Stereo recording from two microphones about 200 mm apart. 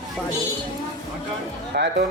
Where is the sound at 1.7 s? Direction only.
55° right (ahead or behind).